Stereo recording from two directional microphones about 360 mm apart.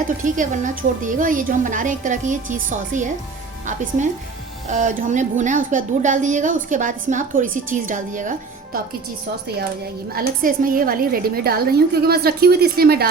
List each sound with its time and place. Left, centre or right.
0.3 s speech: right
10.2 s speech: right